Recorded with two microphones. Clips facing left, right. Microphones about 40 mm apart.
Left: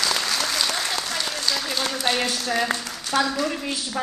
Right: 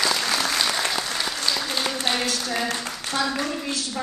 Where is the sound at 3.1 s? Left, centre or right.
Left.